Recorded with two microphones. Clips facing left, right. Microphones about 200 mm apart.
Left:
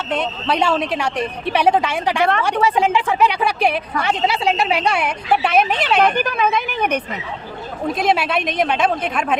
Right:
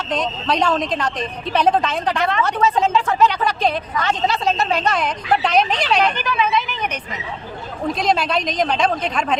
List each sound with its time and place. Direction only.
0.1 s speech: 5° left (ahead or behind)
6.0 s a woman's voice: 55° left (ahead or behind)
7.9 s speech: 5° left (ahead or behind)